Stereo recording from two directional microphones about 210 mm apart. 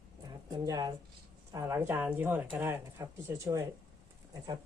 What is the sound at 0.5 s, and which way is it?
Speech, 15° right (ahead or behind).